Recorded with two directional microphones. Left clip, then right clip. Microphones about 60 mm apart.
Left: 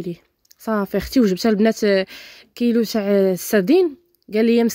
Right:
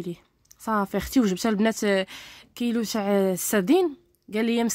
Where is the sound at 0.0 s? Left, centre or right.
Left.